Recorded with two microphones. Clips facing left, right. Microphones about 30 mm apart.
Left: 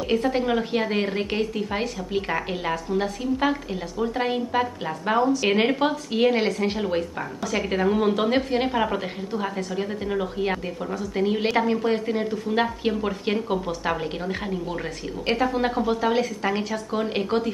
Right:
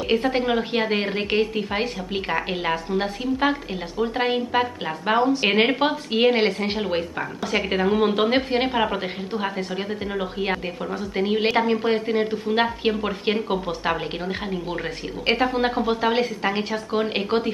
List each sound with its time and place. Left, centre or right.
0.1 s a woman's voice: right